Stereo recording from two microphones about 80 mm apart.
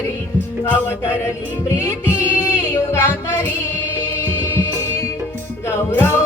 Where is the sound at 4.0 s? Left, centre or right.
Left.